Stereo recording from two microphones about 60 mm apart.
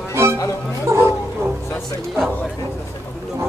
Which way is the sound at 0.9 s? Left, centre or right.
Right.